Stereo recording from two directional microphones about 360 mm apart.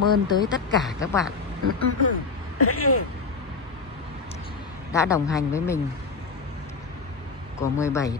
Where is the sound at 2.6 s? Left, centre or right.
Left.